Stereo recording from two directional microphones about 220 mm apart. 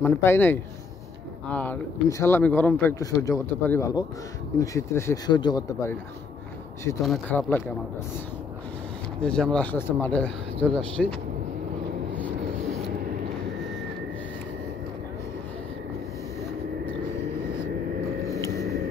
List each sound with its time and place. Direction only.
0.0 s speech: 10° left (ahead or behind)
7.1 s speech: 5° left (ahead or behind)
9.2 s speech: 5° left (ahead or behind)